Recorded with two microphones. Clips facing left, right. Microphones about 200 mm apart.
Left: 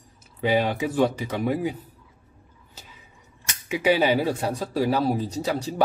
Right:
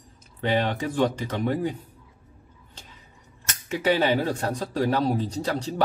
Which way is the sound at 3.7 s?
10° left (ahead or behind).